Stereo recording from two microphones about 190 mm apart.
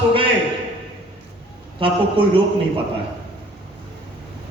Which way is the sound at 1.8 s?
30° right (ahead or behind).